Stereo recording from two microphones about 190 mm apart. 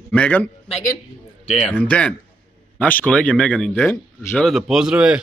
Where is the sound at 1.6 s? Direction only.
10° left (ahead or behind).